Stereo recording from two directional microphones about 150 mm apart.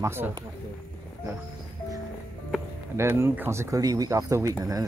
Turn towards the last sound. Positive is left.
turn(degrees=-25)  # may be behind; listen again after turning